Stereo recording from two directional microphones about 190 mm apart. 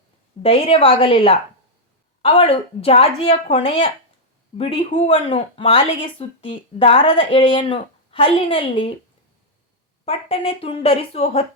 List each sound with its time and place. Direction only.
0.4 s speech: 30° left (ahead or behind)
10.1 s speech: 30° left (ahead or behind)